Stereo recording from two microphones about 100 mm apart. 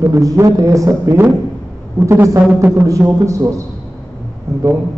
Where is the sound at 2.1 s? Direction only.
25° right (ahead or behind).